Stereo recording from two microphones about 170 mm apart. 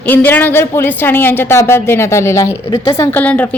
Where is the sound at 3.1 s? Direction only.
10° left (ahead or behind).